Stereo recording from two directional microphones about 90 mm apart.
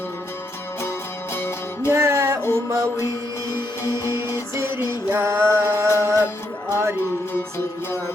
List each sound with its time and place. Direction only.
1.3 s music: 25° left (ahead or behind)
1.9 s music: 30° right (ahead or behind)
4.4 s music: 30° right (ahead or behind)